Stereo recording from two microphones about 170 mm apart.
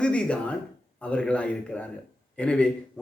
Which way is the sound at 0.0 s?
5° left (ahead or behind).